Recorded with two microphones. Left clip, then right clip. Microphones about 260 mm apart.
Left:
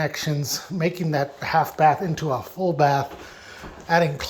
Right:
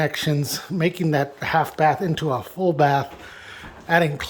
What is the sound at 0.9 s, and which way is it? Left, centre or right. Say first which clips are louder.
Speech: right 2 dB; right.